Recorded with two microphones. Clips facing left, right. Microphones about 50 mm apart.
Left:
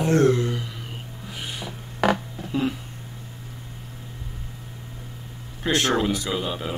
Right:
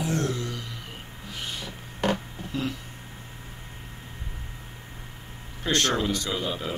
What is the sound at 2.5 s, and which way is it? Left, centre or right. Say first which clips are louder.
Speech: left 6 dB; centre.